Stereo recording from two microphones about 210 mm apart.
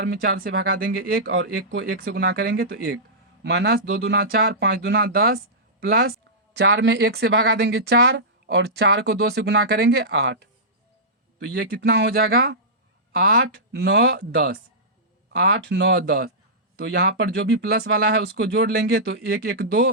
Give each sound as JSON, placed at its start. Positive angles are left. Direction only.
{"t": 0.0, "sound": "speech", "side_deg": -55}
{"t": 6.6, "sound": "speech", "side_deg": -55}